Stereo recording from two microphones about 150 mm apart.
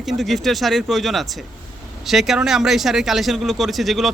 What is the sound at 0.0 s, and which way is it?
Speech, centre (ahead or behind).